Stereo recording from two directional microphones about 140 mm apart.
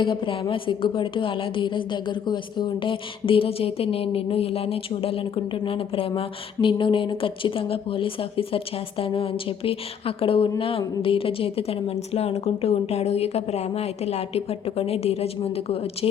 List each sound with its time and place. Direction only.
0.0 s a woman's voice: 35° left (ahead or behind)